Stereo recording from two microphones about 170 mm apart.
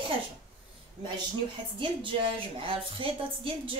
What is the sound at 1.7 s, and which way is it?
A woman's voice, 30° right (ahead or behind).